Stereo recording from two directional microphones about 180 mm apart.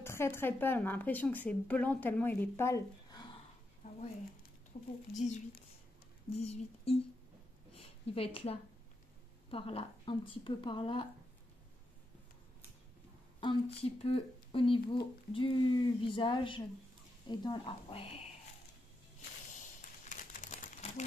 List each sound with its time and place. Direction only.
0.0 s speech: 15° left (ahead or behind)
5.1 s speech: 40° left (ahead or behind)
7.7 s a sound: 30° left (ahead or behind)
9.5 s speech: 30° left (ahead or behind)
13.4 s speech: 25° left (ahead or behind)
19.8 s crumpling: 45° left (ahead or behind)